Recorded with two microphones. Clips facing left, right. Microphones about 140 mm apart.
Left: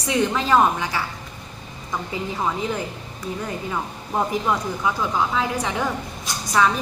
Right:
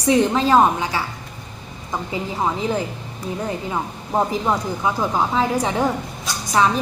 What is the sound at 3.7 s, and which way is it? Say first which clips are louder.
Speech: right 3 dB; 25° right (ahead or behind).